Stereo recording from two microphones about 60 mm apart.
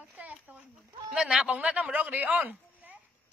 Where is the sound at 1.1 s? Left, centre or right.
Centre; by 3.0 s right.